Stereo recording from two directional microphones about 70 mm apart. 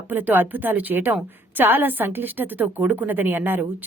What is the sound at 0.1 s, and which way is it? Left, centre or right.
A woman's voice, right.